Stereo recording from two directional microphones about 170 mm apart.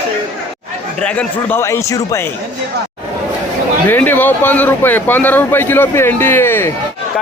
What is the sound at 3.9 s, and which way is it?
Speech, 10° left (ahead or behind).